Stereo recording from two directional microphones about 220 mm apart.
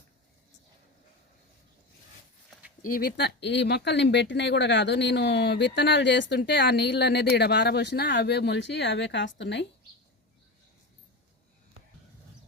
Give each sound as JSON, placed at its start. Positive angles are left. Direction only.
{"t": 2.8, "sound": "speech", "side_deg": 40}